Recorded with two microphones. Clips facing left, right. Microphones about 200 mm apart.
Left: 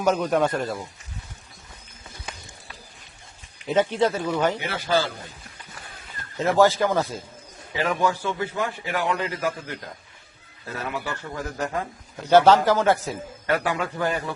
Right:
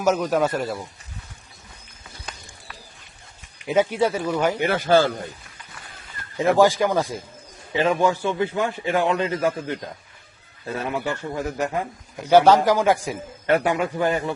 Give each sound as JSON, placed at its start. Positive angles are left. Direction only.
{"t": 0.2, "sound": "speech", "side_deg": -5}
{"t": 3.7, "sound": "a man's voice", "side_deg": -10}
{"t": 4.6, "sound": "speech", "side_deg": -50}
{"t": 6.3, "sound": "a man's voice", "side_deg": -15}
{"t": 10.8, "sound": "a man's voice", "side_deg": -25}